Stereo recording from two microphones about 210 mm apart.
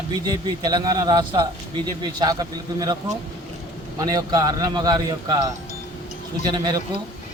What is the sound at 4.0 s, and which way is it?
Speech, 20° right (ahead or behind).